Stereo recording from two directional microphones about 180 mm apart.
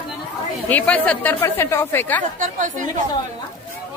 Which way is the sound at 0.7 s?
10° left (ahead or behind).